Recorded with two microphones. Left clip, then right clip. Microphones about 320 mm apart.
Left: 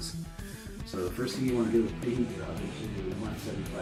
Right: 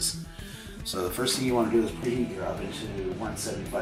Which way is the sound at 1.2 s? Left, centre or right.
Right.